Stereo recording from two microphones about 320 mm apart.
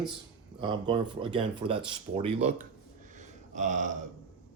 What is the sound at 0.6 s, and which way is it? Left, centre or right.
Speech, centre.